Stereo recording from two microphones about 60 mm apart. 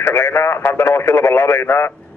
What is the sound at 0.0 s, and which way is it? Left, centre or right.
Speech, left.